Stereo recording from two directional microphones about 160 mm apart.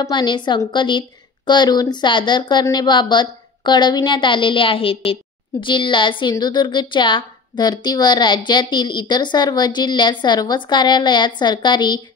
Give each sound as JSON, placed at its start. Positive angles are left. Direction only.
{"t": 0.0, "sound": "a woman's voice", "side_deg": 30}